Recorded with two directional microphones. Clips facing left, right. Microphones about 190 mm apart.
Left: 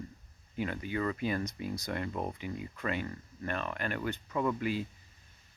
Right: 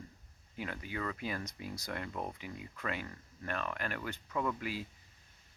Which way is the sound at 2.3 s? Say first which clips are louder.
Left 6 dB; 5° right (ahead or behind).